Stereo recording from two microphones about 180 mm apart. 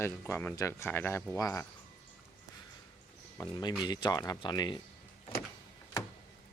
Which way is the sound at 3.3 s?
20° left (ahead or behind).